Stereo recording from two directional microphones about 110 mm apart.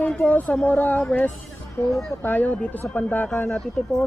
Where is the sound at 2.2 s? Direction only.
15° left (ahead or behind).